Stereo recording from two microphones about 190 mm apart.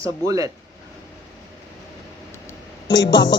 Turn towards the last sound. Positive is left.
turn(degrees=65)  # may be behind; listen again after turning